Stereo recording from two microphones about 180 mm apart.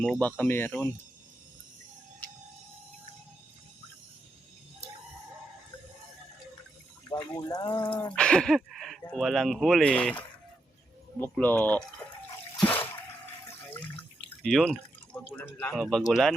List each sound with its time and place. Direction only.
0.0 s speech: 5° left (ahead or behind)
7.3 s speech: 20° left (ahead or behind)
8.1 s speech: 5° left (ahead or behind)
14.4 s speech: centre (ahead or behind)